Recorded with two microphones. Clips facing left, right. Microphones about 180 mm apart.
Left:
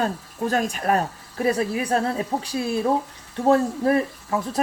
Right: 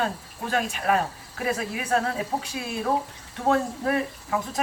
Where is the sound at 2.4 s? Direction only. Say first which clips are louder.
Left 7 dB; 35° left (ahead or behind).